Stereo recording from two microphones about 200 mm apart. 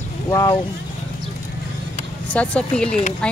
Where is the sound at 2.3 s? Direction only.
5° left (ahead or behind).